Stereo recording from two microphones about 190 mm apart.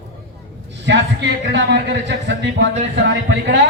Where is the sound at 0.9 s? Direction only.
70° right (ahead or behind).